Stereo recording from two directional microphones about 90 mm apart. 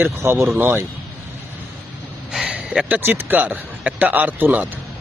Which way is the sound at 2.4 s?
15° right (ahead or behind).